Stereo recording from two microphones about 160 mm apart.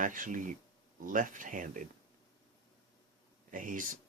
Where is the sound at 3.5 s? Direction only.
55° right (ahead or behind).